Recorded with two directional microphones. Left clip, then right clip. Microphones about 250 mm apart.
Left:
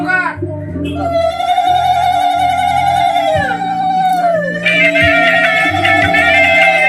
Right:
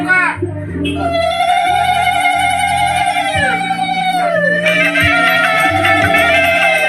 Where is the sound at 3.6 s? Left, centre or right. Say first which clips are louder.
Left 3 dB; left.